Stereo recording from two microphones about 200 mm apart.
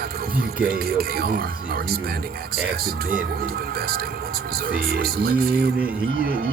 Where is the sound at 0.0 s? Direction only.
50° right (ahead or behind).